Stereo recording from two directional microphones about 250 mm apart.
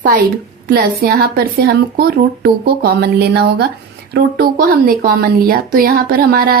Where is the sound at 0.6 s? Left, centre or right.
Right.